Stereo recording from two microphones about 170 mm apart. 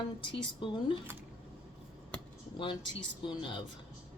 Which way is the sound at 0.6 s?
30° left (ahead or behind).